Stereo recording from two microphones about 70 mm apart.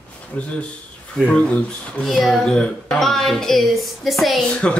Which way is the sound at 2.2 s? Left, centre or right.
Centre.